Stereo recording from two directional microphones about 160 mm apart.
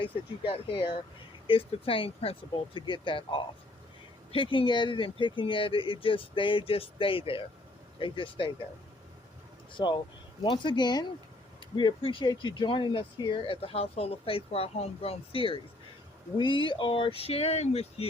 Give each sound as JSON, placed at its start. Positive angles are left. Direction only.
{"t": 0.0, "sound": "speech", "side_deg": 35}
{"t": 9.7, "sound": "speech", "side_deg": 30}